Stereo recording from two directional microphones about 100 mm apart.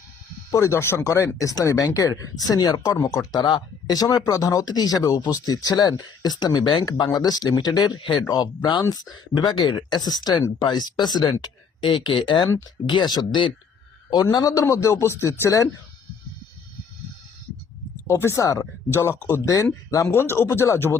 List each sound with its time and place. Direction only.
0.5 s speech: 30° left (ahead or behind)
14.6 s speech: 30° left (ahead or behind)
18.1 s speech: 30° left (ahead or behind)
18.4 s speech: 40° left (ahead or behind)
18.9 s speech: 25° left (ahead or behind)